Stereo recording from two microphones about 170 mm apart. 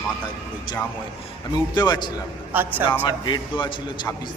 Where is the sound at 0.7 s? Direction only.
25° left (ahead or behind).